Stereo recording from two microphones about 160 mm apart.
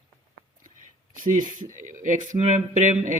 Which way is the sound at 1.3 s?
50° right (ahead or behind).